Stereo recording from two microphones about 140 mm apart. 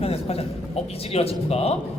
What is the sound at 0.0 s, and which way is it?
A man's voice, 45° left (ahead or behind).